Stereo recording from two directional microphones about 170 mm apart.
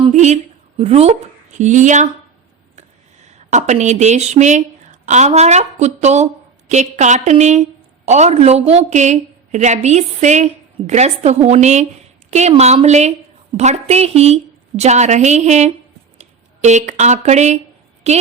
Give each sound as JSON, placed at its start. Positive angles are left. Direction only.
{"t": 0.1, "sound": "a sound", "side_deg": -45}
{"t": 0.8, "sound": "a woman's voice", "side_deg": -35}
{"t": 3.5, "sound": "a woman's voice", "side_deg": -40}